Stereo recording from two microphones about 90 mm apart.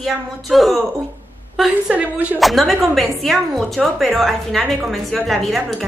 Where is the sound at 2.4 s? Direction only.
Centre (ahead or behind).